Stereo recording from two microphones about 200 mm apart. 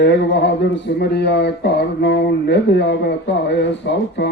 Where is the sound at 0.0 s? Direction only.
60° left (ahead or behind).